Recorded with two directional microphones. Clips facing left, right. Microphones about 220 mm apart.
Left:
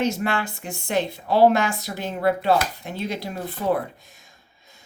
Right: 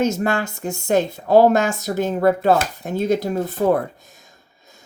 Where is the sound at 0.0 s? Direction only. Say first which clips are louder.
Right 4 dB; 45° right (ahead or behind).